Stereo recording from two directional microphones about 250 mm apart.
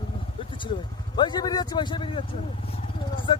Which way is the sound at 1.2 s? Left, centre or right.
Centre.